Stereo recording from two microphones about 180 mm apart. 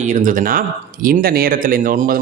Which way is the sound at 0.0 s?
45° right (ahead or behind).